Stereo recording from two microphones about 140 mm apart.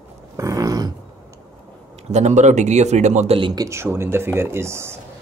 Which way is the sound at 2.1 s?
60° right (ahead or behind).